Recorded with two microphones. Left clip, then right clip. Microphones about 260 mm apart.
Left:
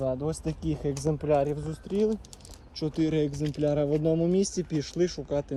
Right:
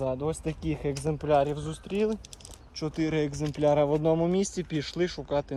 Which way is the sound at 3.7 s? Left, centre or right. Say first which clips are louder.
Right 2 dB; centre.